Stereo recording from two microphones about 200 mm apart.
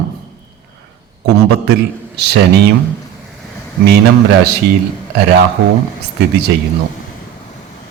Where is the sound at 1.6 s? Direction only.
55° right (ahead or behind).